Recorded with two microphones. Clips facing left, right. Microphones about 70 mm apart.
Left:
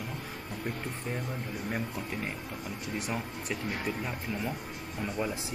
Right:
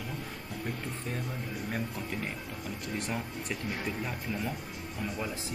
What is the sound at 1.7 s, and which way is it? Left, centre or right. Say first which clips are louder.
Speech: left 1 dB; centre.